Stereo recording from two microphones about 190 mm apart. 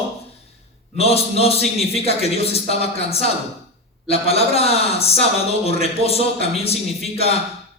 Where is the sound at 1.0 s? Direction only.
30° left (ahead or behind).